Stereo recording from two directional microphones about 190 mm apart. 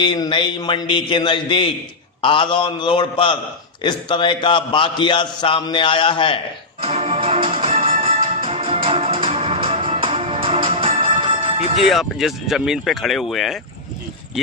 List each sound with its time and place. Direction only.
0.0 s a man's voice: 25° left (ahead or behind)
6.8 s music: 35° right (ahead or behind)
11.9 s speech: centre (ahead or behind)